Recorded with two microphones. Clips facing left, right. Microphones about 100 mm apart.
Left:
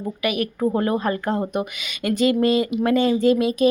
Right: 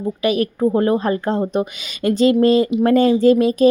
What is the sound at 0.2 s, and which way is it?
Speech, 30° right (ahead or behind).